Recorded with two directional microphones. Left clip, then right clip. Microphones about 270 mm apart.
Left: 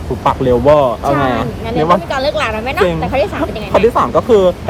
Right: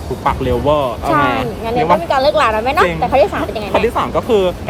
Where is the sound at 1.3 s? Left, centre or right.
Centre.